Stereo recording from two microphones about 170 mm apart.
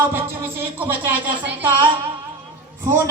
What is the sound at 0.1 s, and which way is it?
Music, 10° right (ahead or behind).